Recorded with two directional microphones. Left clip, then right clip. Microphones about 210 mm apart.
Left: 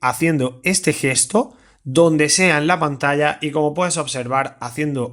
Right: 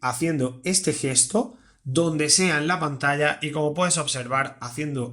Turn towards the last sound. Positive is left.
turn(degrees=35)  # may be behind; listen again after turning